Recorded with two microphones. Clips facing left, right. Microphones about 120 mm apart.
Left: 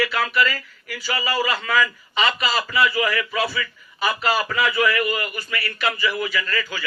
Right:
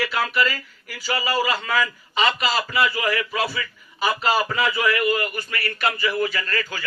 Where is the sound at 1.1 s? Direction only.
5° right (ahead or behind).